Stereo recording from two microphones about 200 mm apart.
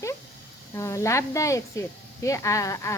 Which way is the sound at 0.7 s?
15° left (ahead or behind).